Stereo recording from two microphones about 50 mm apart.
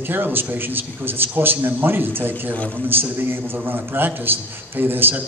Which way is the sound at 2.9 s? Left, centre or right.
Right.